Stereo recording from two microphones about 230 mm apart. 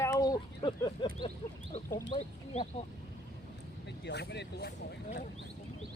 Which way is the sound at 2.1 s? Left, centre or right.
Left.